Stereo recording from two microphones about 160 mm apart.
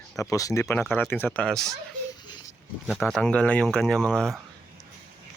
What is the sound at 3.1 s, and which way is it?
Speech, 5° left (ahead or behind).